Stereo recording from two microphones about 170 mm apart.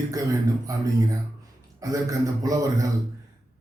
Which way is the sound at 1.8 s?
20° right (ahead or behind).